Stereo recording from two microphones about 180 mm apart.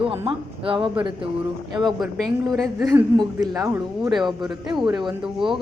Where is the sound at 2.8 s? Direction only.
20° right (ahead or behind).